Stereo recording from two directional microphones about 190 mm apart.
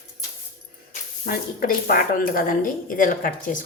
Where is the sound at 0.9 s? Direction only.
50° left (ahead or behind).